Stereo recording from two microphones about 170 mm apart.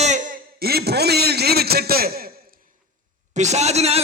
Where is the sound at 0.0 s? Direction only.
45° right (ahead or behind).